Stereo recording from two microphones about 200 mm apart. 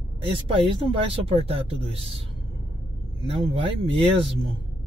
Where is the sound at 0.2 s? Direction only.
25° right (ahead or behind).